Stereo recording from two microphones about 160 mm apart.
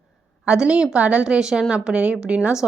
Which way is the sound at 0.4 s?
5° right (ahead or behind).